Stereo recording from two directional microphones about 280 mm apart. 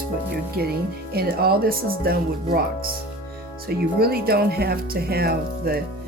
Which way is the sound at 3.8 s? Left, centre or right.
Right.